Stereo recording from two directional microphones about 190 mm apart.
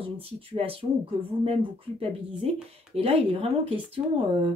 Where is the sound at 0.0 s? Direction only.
30° right (ahead or behind).